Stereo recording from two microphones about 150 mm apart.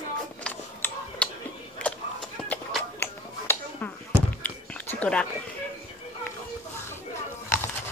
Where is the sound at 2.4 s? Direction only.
15° left (ahead or behind).